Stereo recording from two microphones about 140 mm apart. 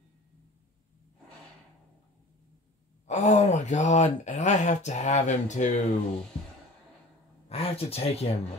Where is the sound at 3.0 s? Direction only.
55° left (ahead or behind).